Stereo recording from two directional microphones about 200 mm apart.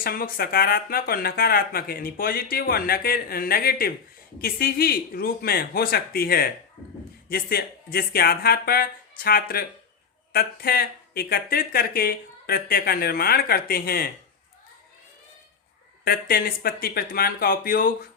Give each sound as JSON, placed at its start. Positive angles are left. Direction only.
{"t": 0.0, "sound": "speech", "side_deg": 45}
{"t": 16.0, "sound": "speech", "side_deg": 50}